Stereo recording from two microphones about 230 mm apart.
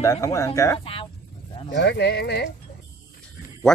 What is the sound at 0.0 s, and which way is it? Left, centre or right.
Speech, centre.